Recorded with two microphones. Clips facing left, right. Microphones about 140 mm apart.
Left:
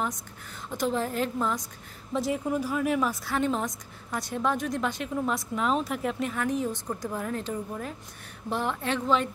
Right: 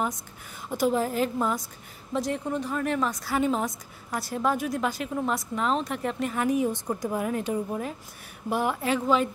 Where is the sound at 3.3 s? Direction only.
5° right (ahead or behind).